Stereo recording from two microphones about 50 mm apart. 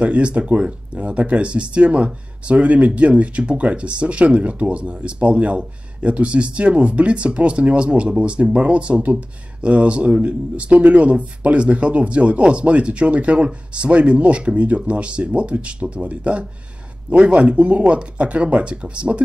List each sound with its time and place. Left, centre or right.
0.0 s speech: right